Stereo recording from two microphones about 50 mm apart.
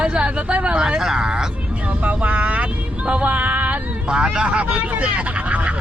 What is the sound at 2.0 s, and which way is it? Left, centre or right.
Speech, right.